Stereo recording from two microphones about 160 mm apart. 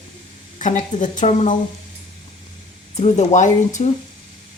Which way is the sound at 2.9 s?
45° left (ahead or behind).